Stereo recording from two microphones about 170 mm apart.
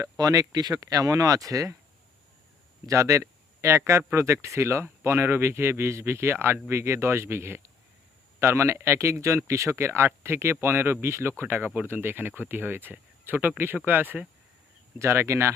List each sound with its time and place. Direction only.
0.0 s speech: 20° right (ahead or behind)
2.8 s speech: 15° right (ahead or behind)